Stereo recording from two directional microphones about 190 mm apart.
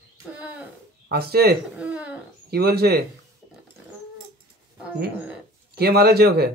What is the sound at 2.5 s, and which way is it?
Speech, 55° right (ahead or behind).